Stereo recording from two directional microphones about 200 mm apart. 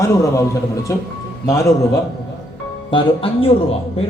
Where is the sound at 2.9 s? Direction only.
25° left (ahead or behind).